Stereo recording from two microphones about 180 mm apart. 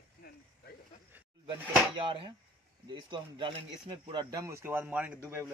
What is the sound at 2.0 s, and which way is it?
Speech, 30° right (ahead or behind).